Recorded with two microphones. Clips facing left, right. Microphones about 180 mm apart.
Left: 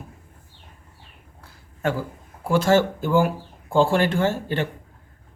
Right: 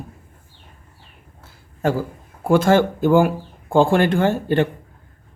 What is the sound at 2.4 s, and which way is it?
Speech, 55° right (ahead or behind).